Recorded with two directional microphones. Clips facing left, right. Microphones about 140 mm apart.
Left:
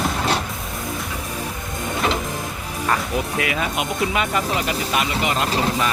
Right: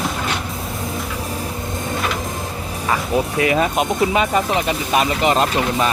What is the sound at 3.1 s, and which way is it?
Speech, 30° right (ahead or behind).